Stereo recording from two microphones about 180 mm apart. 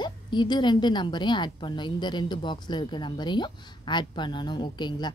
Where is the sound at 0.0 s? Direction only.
25° left (ahead or behind).